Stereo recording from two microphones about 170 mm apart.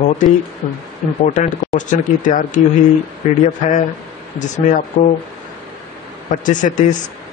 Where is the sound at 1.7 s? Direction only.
50° left (ahead or behind).